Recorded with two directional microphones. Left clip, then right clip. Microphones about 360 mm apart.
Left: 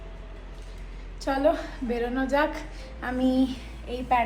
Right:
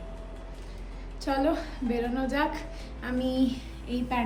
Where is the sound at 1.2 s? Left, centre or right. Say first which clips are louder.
Left 3 dB; centre.